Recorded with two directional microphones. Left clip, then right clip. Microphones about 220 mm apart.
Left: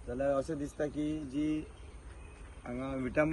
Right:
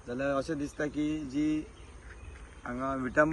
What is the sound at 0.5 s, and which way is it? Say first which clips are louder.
Speech: right 2 dB; 25° right (ahead or behind).